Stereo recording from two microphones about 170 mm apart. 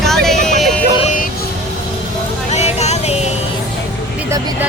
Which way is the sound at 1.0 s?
55° left (ahead or behind).